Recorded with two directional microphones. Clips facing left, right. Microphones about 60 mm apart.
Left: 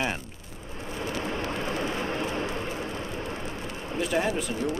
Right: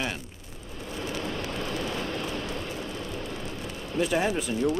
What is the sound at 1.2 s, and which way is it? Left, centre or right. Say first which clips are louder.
Vehicle: left 2 dB; left.